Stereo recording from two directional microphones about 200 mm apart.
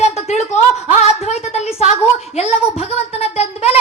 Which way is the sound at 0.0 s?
35° left (ahead or behind).